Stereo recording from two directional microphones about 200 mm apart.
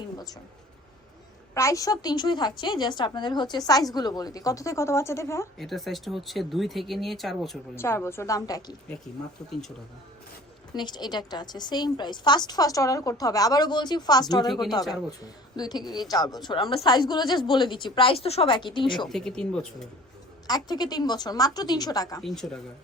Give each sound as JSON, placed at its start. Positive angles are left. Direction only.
{"t": 1.5, "sound": "a woman's voice", "side_deg": 15}
{"t": 5.5, "sound": "speech", "side_deg": 0}
{"t": 7.8, "sound": "a woman's voice", "side_deg": 10}
{"t": 9.5, "sound": "speech", "side_deg": 0}
{"t": 10.8, "sound": "a woman's voice", "side_deg": 20}
{"t": 18.9, "sound": "speech", "side_deg": 0}
{"t": 20.5, "sound": "a woman's voice", "side_deg": 20}
{"t": 22.2, "sound": "speech", "side_deg": 0}